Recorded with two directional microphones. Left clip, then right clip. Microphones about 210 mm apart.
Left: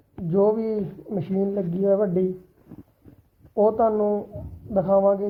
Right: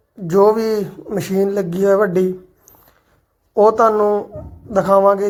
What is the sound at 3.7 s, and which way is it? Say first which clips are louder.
Speech: right 8 dB; 25° right (ahead or behind).